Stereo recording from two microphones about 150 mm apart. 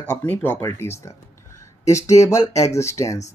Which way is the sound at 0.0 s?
10° left (ahead or behind).